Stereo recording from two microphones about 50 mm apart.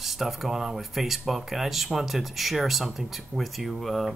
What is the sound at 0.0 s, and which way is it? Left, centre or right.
Speech, centre.